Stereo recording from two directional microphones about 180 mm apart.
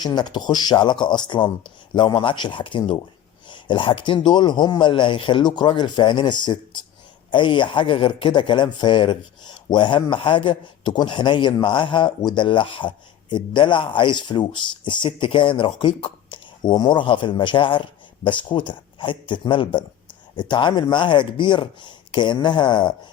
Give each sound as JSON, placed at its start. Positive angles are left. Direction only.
{"t": 0.0, "sound": "speech", "side_deg": 25}